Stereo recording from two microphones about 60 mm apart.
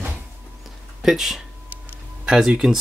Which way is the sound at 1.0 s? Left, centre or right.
Centre.